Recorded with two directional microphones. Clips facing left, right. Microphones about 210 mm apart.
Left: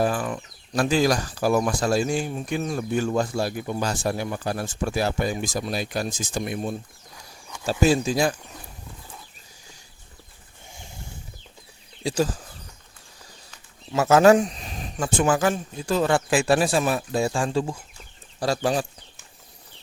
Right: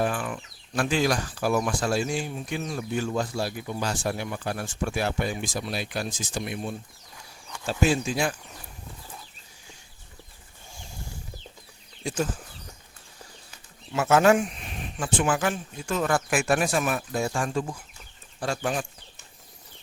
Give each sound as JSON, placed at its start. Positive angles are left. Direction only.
{"t": 0.0, "sound": "speech", "side_deg": 40}
{"t": 12.0, "sound": "speech", "side_deg": 35}
{"t": 13.9, "sound": "speech", "side_deg": 40}